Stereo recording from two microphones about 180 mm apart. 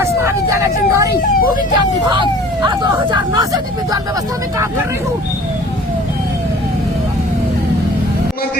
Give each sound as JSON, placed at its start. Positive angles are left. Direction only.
{"t": 0.0, "sound": "speech", "side_deg": -15}